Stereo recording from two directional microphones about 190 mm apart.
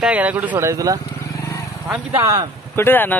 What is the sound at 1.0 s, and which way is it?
Vehicle, 15° left (ahead or behind).